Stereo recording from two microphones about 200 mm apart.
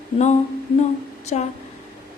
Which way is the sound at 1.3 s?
35° left (ahead or behind).